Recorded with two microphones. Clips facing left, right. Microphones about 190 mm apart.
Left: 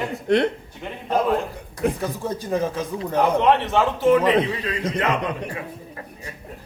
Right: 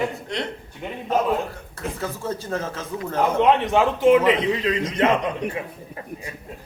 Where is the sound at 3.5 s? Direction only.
15° right (ahead or behind).